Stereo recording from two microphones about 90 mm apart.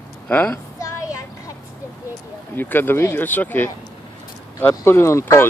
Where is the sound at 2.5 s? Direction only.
20° left (ahead or behind).